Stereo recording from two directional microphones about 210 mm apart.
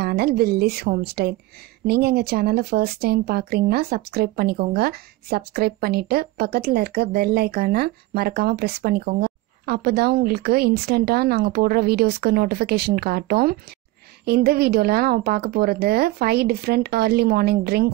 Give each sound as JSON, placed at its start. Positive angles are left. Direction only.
{"t": 0.0, "sound": "speech", "side_deg": -45}